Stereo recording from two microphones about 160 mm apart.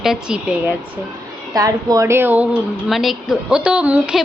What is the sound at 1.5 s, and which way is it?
Speech, 20° right (ahead or behind).